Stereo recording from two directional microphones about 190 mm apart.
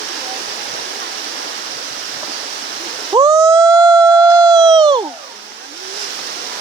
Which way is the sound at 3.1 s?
15° right (ahead or behind).